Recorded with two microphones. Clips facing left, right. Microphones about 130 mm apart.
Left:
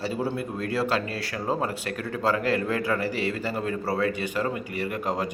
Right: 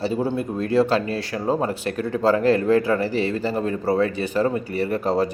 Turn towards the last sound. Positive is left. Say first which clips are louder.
# right 7 dB
turn(degrees=-30)  # may be behind; listen again after turning